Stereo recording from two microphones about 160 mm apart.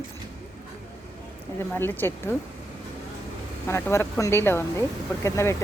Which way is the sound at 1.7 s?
10° left (ahead or behind).